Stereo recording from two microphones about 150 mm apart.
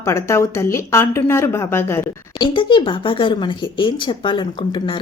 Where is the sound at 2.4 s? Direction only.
35° left (ahead or behind).